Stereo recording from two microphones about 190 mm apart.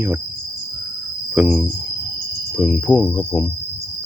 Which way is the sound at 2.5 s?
5° left (ahead or behind).